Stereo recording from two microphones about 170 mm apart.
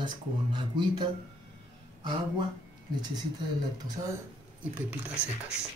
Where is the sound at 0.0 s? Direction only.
25° right (ahead or behind).